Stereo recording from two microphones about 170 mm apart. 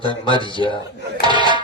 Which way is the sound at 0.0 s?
30° left (ahead or behind).